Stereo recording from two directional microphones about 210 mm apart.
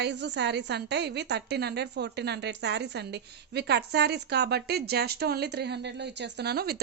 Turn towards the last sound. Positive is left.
turn(degrees=-50)  # may be behind; listen again after turning